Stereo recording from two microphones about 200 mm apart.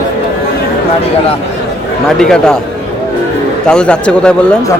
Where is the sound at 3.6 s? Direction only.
5° left (ahead or behind).